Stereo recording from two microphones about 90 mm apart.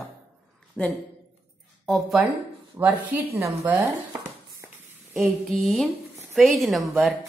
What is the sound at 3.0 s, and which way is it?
Speech, 15° right (ahead or behind).